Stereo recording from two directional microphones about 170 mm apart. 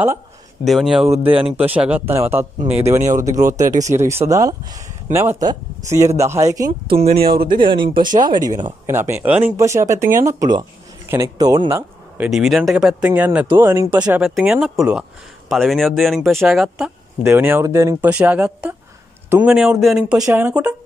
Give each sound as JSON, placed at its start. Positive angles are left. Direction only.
{"t": 0.7, "sound": "speech", "side_deg": 0}
{"t": 7.1, "sound": "speech", "side_deg": -60}
{"t": 7.5, "sound": "speech", "side_deg": -30}
{"t": 12.2, "sound": "speech", "side_deg": 0}
{"t": 17.2, "sound": "speech", "side_deg": -15}